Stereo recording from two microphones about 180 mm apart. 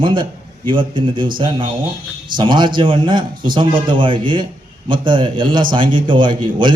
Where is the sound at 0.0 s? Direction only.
25° right (ahead or behind).